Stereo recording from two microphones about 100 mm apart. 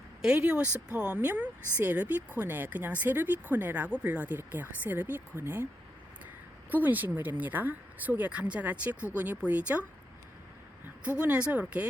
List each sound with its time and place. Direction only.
0.2 s speech: 10° right (ahead or behind)
6.7 s speech: 20° right (ahead or behind)
11.2 s speech: 15° right (ahead or behind)